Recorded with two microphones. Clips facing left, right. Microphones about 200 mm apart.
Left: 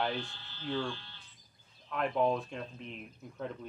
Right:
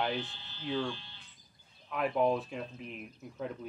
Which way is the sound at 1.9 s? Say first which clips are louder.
Right 1 dB; 5° right (ahead or behind).